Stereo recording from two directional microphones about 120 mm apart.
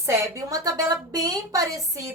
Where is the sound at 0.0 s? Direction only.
25° right (ahead or behind).